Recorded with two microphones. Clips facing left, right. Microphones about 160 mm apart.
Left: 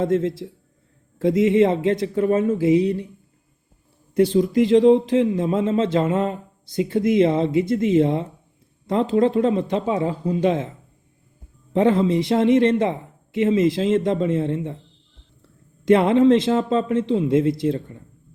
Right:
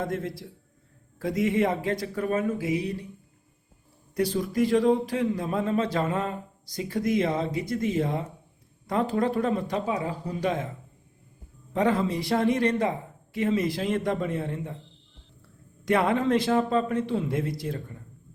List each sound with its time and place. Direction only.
0.0 s speech: 25° left (ahead or behind)
4.1 s speech: 25° left (ahead or behind)
11.7 s speech: 25° left (ahead or behind)
15.8 s speech: 25° left (ahead or behind)